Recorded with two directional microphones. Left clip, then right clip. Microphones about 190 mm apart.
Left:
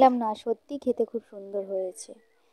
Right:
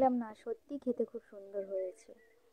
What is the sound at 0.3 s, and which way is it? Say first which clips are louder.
Speech: left 12 dB; 35° left (ahead or behind).